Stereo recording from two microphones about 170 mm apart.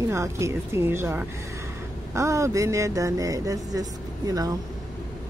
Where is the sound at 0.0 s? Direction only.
15° right (ahead or behind).